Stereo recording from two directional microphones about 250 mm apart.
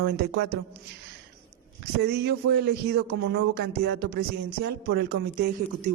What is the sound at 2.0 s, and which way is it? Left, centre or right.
A woman's voice, right.